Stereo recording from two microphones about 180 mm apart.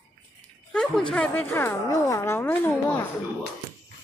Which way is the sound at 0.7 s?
5° left (ahead or behind).